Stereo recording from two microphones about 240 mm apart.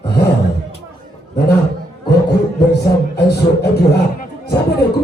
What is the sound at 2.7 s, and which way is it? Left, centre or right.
Speech, left.